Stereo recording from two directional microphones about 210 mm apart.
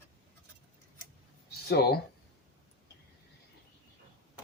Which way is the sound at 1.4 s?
50° left (ahead or behind).